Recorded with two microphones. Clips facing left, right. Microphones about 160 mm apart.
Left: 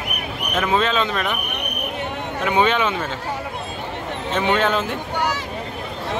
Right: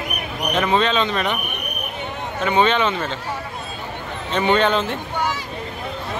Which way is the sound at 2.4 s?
10° left (ahead or behind).